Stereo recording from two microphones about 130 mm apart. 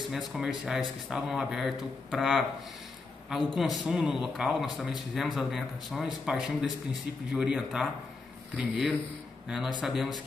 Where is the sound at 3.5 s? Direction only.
Centre (ahead or behind).